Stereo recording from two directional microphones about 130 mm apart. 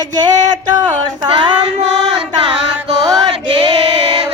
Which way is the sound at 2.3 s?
45° right (ahead or behind).